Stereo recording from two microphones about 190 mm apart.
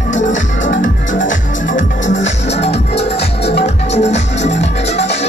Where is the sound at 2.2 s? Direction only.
65° left (ahead or behind).